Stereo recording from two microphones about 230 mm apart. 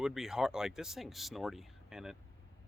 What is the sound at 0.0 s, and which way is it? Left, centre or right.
Speech, centre.